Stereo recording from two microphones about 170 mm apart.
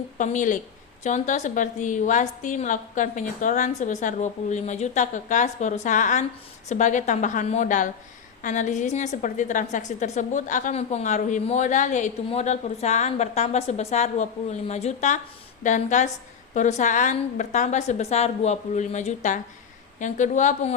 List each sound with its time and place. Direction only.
0.2 s a woman's voice: 50° left (ahead or behind)